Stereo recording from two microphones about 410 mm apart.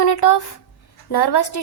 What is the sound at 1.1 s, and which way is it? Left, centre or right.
Speech, left.